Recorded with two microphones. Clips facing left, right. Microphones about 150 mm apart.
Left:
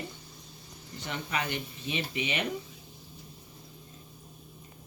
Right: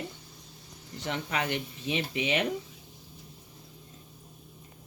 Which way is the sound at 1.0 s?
90° right.